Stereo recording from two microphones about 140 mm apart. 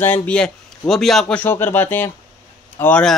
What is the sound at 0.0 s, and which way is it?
A man's voice, 10° left (ahead or behind).